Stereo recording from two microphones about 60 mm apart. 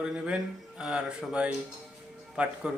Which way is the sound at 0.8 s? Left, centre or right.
Centre.